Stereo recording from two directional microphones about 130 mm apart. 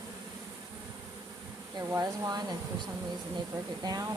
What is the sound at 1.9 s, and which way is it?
Speech, 25° right (ahead or behind).